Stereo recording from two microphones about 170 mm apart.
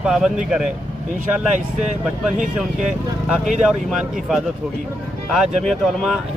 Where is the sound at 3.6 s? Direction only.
Centre (ahead or behind).